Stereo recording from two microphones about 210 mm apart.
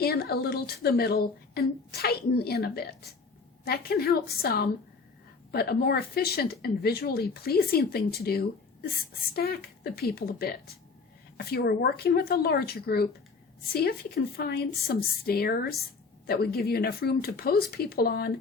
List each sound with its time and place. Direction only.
0.0 s speech: 45° left (ahead or behind)